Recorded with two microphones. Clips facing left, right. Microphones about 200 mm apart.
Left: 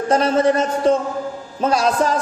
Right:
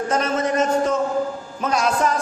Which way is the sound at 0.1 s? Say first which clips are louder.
Left 7 dB; 35° left (ahead or behind).